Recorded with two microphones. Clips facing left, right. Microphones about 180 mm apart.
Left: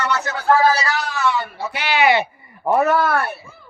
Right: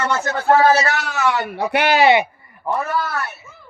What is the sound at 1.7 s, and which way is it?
Speech, 55° right (ahead or behind).